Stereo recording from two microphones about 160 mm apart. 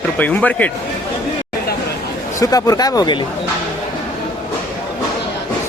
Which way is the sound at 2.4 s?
20° left (ahead or behind).